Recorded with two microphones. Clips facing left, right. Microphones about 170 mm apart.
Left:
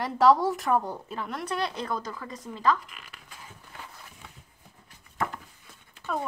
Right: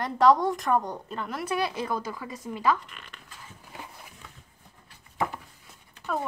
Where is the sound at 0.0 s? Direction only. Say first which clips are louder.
Even; centre (ahead or behind).